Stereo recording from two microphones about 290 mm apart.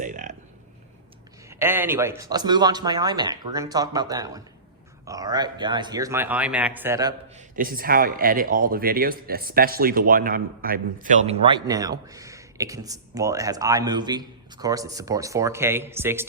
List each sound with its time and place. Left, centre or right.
0.0 s a sound: right
1.5 s a man's voice: centre
7.3 s a man's voice: right; by 16.2 s centre